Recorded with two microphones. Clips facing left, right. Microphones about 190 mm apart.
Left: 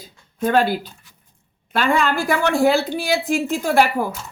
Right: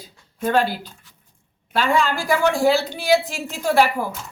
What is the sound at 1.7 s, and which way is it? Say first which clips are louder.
A woman's voice: left 1 dB; 55° left (ahead or behind).